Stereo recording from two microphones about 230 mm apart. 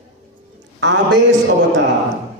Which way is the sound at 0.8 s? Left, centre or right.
Right.